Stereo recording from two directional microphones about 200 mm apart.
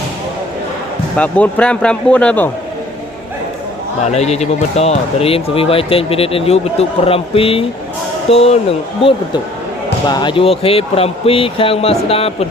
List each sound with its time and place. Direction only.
1.1 s speech: 5° left (ahead or behind)
4.1 s speech: 35° left (ahead or behind)